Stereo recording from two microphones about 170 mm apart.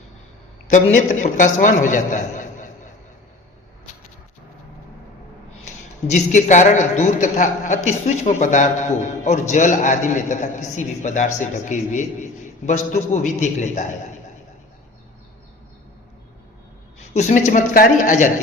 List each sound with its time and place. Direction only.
0.9 s a man's voice: 45° left (ahead or behind)
5.6 s a man's voice: 45° left (ahead or behind)
17.2 s a man's voice: 45° left (ahead or behind)